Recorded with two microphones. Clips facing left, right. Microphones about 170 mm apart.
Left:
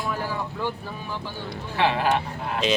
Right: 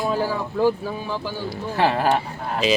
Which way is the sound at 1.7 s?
45° right (ahead or behind).